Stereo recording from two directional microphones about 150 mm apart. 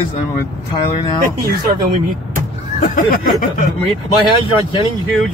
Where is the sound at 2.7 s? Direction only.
55° left (ahead or behind).